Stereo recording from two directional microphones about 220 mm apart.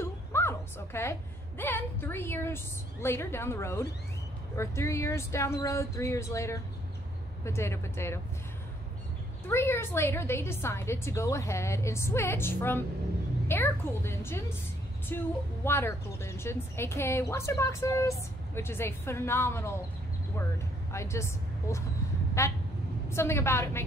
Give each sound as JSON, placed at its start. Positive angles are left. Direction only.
{"t": 0.0, "sound": "a sound", "side_deg": 10}
{"t": 1.6, "sound": "a woman's voice", "side_deg": 10}
{"t": 9.5, "sound": "a woman's voice", "side_deg": 10}
{"t": 20.9, "sound": "a woman's voice", "side_deg": 15}